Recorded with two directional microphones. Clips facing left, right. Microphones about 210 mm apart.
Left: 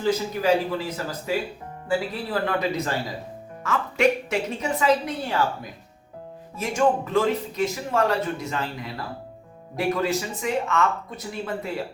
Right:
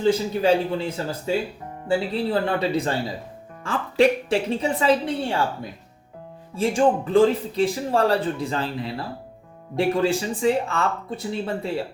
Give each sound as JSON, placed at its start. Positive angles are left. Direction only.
{"t": 0.0, "sound": "speech", "side_deg": -30}
{"t": 6.6, "sound": "speech", "side_deg": -30}